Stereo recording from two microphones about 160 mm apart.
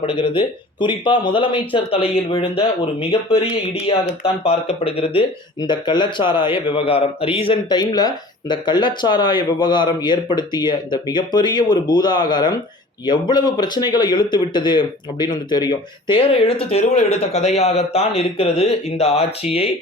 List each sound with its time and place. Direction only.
0.0 s a man's voice: 35° left (ahead or behind)